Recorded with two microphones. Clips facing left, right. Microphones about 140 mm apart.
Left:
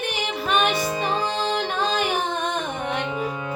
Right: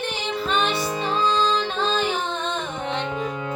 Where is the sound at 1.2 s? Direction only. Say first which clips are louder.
Right 3 dB; 60° left (ahead or behind).